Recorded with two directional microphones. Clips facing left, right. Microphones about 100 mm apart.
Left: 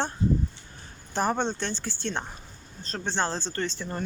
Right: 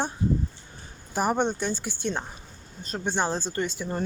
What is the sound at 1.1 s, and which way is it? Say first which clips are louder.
Speech: right 2 dB; 15° right (ahead or behind).